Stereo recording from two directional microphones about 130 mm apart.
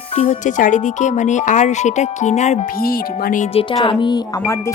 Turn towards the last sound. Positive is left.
turn(degrees=40)  # may be behind; listen again after turning